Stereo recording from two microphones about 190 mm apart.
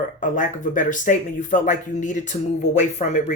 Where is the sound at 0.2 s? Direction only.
45° left (ahead or behind).